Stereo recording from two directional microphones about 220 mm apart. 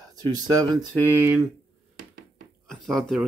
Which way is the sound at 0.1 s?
15° right (ahead or behind).